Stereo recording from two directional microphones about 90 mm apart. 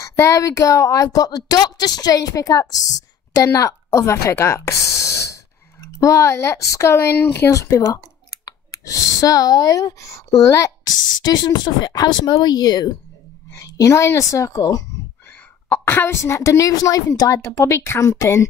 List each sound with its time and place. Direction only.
0.0 s speech: 30° left (ahead or behind); by 12.9 s 50° left (ahead or behind)
13.5 s speech: 40° left (ahead or behind)
15.2 s speech: 25° left (ahead or behind)